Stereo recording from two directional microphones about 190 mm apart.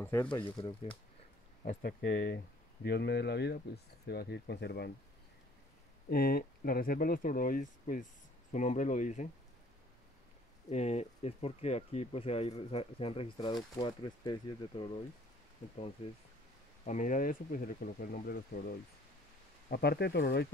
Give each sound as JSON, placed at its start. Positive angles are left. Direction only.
{"t": 0.0, "sound": "speech", "side_deg": 15}
{"t": 0.5, "sound": "speech", "side_deg": 25}
{"t": 1.6, "sound": "speech", "side_deg": 45}
{"t": 6.0, "sound": "speech", "side_deg": 55}
{"t": 10.7, "sound": "speech", "side_deg": 35}
{"t": 16.0, "sound": "speech", "side_deg": 35}
{"t": 19.7, "sound": "speech", "side_deg": 60}